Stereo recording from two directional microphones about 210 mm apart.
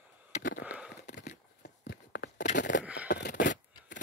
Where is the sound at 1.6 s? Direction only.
50° left (ahead or behind).